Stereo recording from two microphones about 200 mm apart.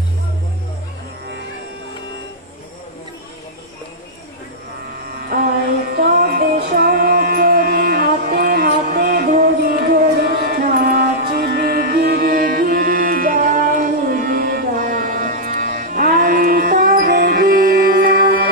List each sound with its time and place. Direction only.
6.0 s music: 55° right (ahead or behind)